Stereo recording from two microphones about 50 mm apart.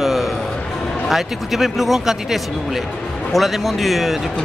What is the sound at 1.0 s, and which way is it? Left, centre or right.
Speech, centre.